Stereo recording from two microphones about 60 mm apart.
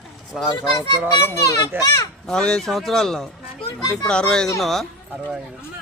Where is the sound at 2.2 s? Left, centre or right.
Centre.